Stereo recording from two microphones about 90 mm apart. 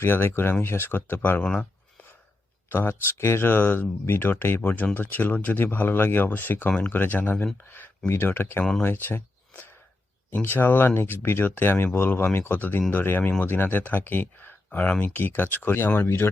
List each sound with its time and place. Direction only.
0.0 s speech: 25° left (ahead or behind)
1.4 s speech: 10° left (ahead or behind)
2.6 s speech: 25° left (ahead or behind)
10.3 s speech: 25° left (ahead or behind)